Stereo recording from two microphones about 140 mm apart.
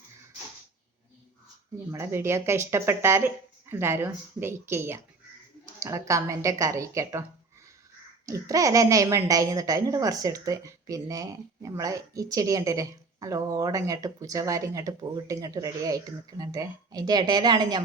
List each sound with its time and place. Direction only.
1.9 s a woman's voice: 20° right (ahead or behind)
8.3 s a woman's voice: 25° right (ahead or behind)